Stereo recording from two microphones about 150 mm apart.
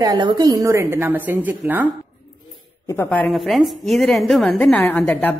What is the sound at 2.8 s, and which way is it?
Speech, 15° left (ahead or behind).